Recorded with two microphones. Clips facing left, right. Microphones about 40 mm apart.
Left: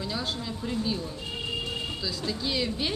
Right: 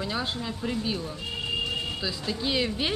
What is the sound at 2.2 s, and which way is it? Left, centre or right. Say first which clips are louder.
Speech: right 2 dB; right.